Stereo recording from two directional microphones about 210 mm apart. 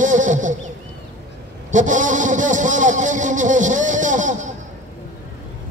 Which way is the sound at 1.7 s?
35° right (ahead or behind).